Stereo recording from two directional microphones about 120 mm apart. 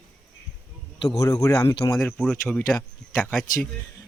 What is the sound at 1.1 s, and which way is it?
Speech, 30° left (ahead or behind).